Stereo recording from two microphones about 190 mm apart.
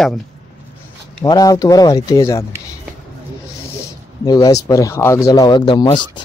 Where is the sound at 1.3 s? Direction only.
20° left (ahead or behind).